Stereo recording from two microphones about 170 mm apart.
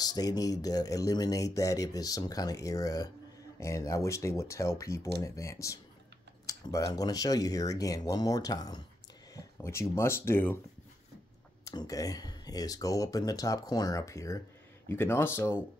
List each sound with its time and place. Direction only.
0.0 s speech: 20° left (ahead or behind)
9.3 s a sound: 20° left (ahead or behind)
9.8 s speech: 15° left (ahead or behind)
11.6 s speech: 20° left (ahead or behind)